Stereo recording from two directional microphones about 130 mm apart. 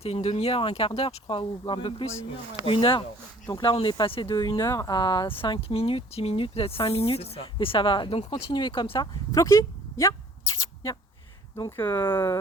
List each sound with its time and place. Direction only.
0.0 s speech: 50° left (ahead or behind)
4.5 s speech: 25° left (ahead or behind)